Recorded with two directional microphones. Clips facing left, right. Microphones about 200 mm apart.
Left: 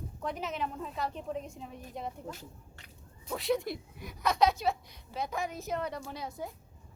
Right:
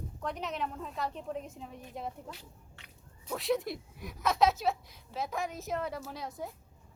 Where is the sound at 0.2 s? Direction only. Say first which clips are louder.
Left 1 dB; centre (ahead or behind).